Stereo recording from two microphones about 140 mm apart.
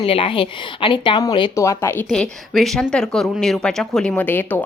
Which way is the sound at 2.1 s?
5° left (ahead or behind).